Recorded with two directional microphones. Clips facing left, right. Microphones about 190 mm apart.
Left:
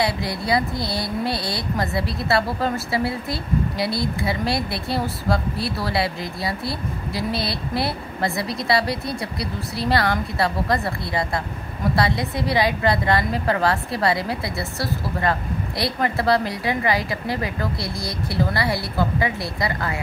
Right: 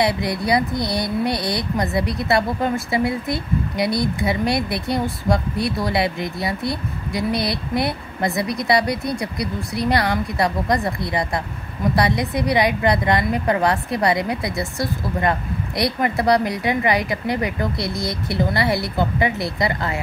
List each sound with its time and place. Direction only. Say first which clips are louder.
0.0 s a woman's voice: right 3 dB; 20° right (ahead or behind)